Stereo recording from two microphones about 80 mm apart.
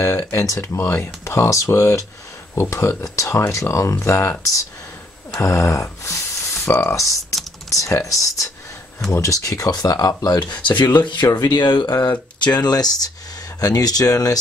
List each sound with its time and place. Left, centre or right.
0.3 s speech: left
10.7 s speech: left
11.0 s speech: left
12.1 s speech: left